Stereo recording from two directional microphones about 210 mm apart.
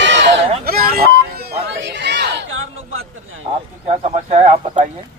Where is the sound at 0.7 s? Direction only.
45° right (ahead or behind).